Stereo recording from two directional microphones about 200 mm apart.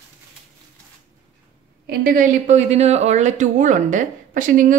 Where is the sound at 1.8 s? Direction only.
45° right (ahead or behind).